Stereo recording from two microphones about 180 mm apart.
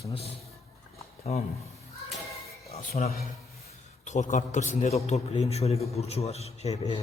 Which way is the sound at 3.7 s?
40° left (ahead or behind).